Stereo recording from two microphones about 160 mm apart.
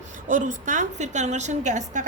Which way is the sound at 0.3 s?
55° right (ahead or behind).